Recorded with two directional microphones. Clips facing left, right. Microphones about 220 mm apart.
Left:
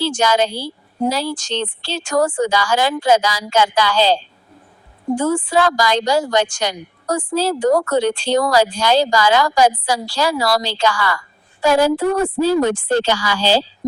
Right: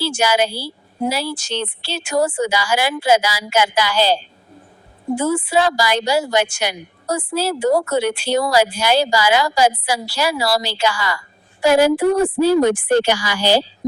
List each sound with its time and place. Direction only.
0.0 s a woman's voice: 10° right (ahead or behind)
10.9 s a woman's voice: 20° right (ahead or behind)